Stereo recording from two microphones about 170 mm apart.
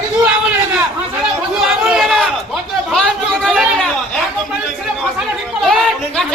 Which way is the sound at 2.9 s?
Centre (ahead or behind).